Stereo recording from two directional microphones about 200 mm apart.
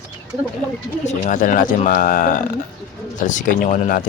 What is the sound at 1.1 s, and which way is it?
Speech, 40° left (ahead or behind).